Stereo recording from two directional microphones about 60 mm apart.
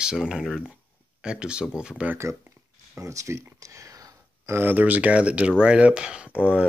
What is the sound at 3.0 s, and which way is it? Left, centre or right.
Speech, right.